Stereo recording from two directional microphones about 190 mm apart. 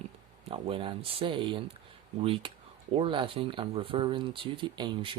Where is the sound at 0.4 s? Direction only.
30° right (ahead or behind).